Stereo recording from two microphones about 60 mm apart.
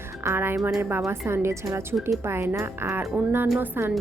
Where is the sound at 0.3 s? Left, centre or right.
Right.